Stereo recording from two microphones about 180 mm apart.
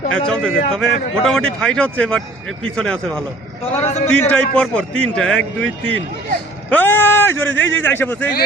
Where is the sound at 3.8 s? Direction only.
40° left (ahead or behind).